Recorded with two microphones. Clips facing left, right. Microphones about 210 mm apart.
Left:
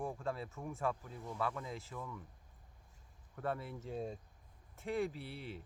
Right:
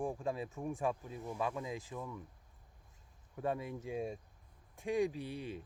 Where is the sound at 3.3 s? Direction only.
15° right (ahead or behind).